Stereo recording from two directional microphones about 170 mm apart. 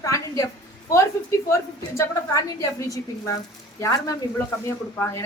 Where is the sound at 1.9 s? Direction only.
20° left (ahead or behind).